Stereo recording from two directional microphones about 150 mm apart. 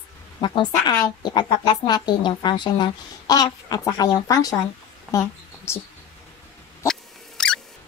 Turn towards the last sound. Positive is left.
turn(degrees=5)  # may be behind; listen again after turning